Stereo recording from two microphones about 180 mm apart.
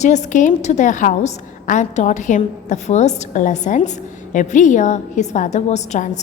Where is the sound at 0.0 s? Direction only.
40° left (ahead or behind).